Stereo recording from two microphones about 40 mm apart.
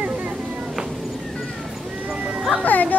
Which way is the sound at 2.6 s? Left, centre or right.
Left.